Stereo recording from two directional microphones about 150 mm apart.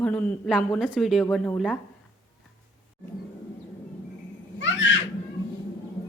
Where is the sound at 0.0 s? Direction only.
10° left (ahead or behind).